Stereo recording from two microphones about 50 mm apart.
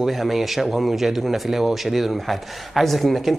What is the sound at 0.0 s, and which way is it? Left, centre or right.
Speech, centre.